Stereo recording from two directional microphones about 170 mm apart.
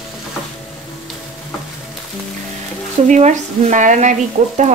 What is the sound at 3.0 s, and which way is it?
Speech, 45° right (ahead or behind).